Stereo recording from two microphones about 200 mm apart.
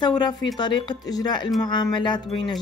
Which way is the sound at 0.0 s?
20° left (ahead or behind).